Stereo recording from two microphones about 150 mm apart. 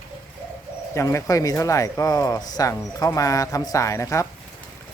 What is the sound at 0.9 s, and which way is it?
Speech, 20° left (ahead or behind).